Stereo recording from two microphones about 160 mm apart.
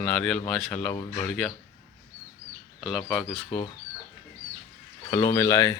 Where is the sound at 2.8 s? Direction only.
5° right (ahead or behind).